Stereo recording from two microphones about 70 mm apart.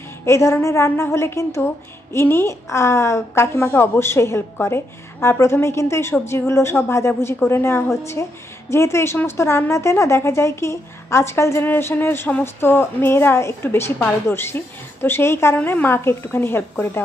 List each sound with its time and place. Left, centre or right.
0.2 s a woman's voice: left